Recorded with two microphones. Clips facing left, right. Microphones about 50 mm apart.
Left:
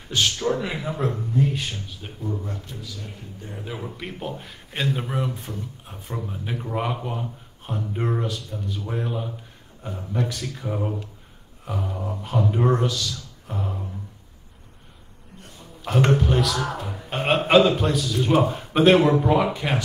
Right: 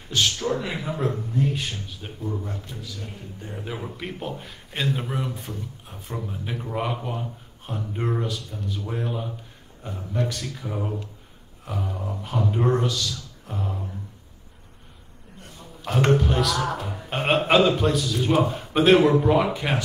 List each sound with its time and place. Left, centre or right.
0.6 s a man's voice: centre
3.5 s a man's voice: centre
15.8 s a man's voice: centre